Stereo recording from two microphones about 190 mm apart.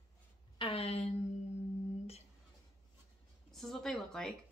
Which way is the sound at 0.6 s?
30° left (ahead or behind).